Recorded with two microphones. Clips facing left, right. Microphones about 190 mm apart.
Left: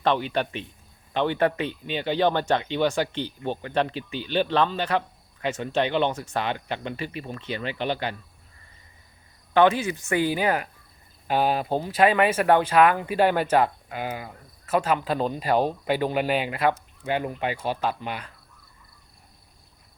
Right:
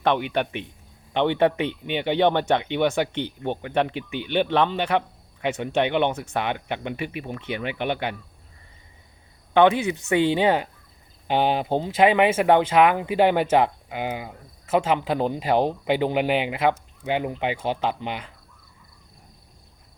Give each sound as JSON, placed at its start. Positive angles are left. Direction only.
{"t": 0.0, "sound": "speech", "side_deg": -15}
{"t": 9.5, "sound": "speech", "side_deg": -20}